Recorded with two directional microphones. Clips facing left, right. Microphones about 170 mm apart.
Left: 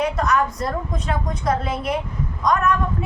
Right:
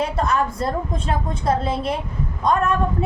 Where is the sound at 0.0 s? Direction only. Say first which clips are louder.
Left 1 dB; 30° right (ahead or behind).